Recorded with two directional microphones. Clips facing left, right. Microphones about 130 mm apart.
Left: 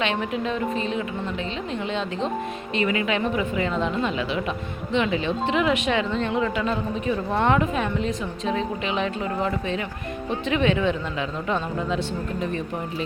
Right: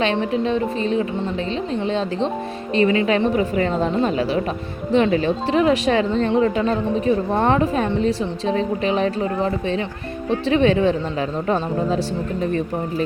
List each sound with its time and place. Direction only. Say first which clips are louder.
0.0 s speech: right 5 dB; 35° right (ahead or behind)